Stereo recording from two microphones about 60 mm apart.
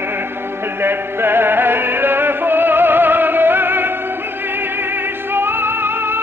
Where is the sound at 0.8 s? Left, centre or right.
Right.